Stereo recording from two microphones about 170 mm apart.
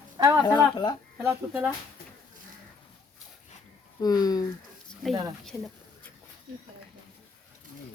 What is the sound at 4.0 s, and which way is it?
Speech, 20° left (ahead or behind).